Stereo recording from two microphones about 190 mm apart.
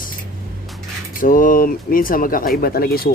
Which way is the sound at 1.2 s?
45° left (ahead or behind).